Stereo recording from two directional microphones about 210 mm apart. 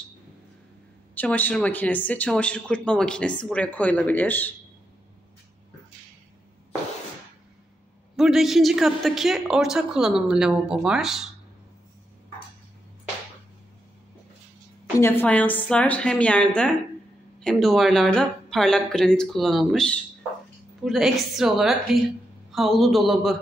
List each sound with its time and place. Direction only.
1.1 s speech: 10° left (ahead or behind)
8.2 s a woman's voice: centre (ahead or behind)
15.0 s a woman's voice: 10° left (ahead or behind)